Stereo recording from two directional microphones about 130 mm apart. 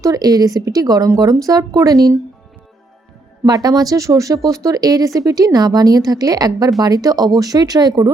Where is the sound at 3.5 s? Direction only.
30° right (ahead or behind).